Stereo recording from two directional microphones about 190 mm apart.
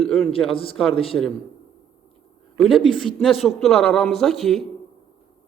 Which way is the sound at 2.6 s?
Centre (ahead or behind).